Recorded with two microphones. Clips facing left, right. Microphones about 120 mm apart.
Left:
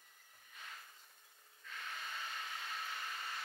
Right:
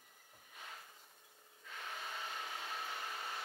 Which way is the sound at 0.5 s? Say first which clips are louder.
Right 1 dB; 15° right (ahead or behind).